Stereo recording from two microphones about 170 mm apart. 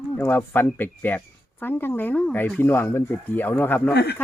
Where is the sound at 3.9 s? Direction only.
75° left (ahead or behind).